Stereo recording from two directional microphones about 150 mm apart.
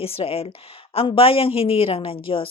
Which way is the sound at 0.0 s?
40° left (ahead or behind).